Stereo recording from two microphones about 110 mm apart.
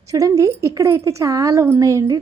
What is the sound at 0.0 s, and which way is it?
A woman's voice, 30° right (ahead or behind).